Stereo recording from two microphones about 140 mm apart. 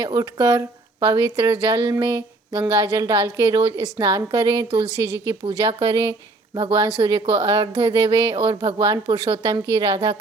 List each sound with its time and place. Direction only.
0.0 s a woman's voice: 25° right (ahead or behind)
4.9 s a woman's voice: 25° left (ahead or behind)
5.2 s a woman's voice: 35° right (ahead or behind)